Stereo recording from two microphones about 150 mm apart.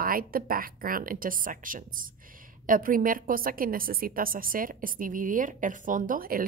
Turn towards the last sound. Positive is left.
turn(degrees=-70)  # may be behind; listen again after turning